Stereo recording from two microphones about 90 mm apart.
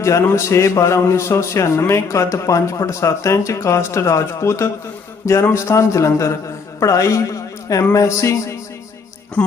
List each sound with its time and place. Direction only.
0.0 s a man's voice: 30° left (ahead or behind)